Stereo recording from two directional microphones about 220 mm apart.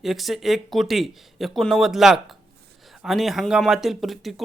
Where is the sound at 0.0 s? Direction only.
Centre (ahead or behind).